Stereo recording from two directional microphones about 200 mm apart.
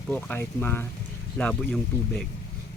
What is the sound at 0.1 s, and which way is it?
Speech, 10° left (ahead or behind).